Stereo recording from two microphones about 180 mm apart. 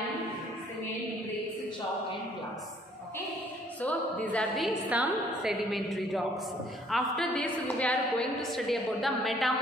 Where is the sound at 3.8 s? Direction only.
10° left (ahead or behind).